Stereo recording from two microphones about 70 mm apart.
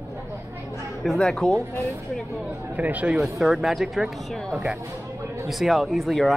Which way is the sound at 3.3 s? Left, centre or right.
Centre.